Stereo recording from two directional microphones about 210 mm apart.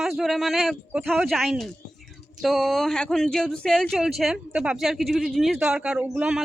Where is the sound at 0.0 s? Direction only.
Centre (ahead or behind).